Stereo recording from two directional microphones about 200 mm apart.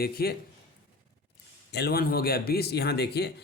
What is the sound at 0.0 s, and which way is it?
Speech, 50° left (ahead or behind).